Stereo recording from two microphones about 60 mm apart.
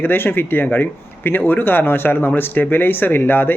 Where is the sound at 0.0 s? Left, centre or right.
Left.